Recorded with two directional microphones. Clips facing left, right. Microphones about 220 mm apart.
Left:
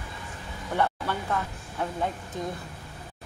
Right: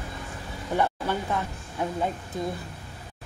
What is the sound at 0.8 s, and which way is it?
Speech, 15° right (ahead or behind).